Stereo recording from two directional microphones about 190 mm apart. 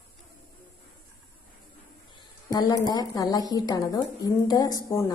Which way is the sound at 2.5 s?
20° left (ahead or behind).